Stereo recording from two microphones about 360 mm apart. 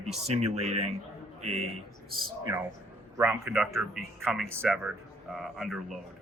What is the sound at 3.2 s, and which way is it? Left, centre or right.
Speech, centre.